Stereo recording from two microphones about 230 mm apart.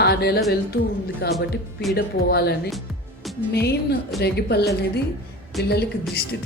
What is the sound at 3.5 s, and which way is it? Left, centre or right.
A woman's voice, left.